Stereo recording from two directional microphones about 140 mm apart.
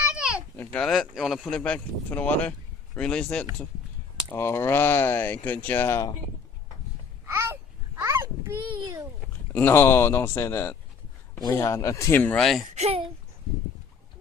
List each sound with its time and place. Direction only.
0.1 s a sound: 10° right (ahead or behind)
0.5 s speech: 10° left (ahead or behind)
4.4 s speech: 15° left (ahead or behind)
7.3 s babbling: 15° right (ahead or behind)
9.5 s speech: 15° left (ahead or behind)
12.7 s speech: 50° right (ahead or behind)